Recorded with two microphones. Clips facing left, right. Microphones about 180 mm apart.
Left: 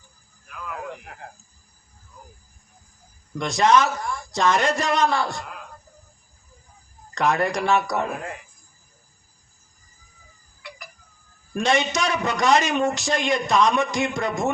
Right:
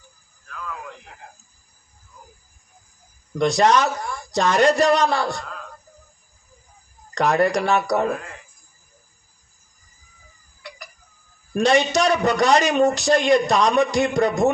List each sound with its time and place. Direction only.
0.4 s a sound: 15° left (ahead or behind)
1.1 s a man's voice: 65° left (ahead or behind)
3.3 s a man's voice: 35° right (ahead or behind)
7.1 s a man's voice: 35° right (ahead or behind)
11.5 s a man's voice: 35° right (ahead or behind)